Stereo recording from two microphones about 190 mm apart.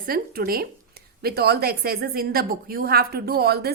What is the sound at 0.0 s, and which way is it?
A woman's voice, 50° right (ahead or behind).